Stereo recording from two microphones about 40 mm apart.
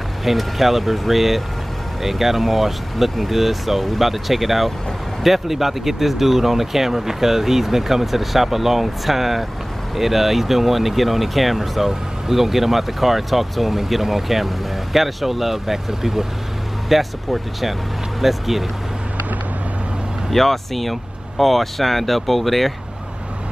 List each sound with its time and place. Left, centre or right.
0.2 s speech: centre
20.2 s speech: centre